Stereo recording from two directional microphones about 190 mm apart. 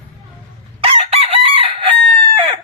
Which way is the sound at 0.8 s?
30° right (ahead or behind).